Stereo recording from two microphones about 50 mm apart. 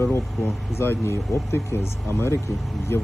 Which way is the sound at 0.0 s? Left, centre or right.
Left.